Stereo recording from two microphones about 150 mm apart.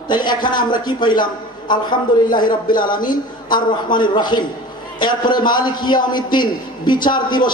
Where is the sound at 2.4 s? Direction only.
65° left (ahead or behind).